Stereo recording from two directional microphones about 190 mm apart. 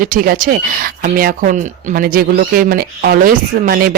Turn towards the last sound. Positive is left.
turn(degrees=-50)  # may be behind; listen again after turning